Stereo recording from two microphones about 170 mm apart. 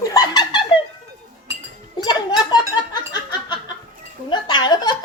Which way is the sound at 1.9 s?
25° left (ahead or behind).